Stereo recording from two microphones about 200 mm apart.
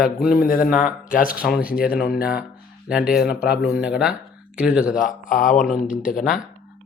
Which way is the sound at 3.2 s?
50° left (ahead or behind).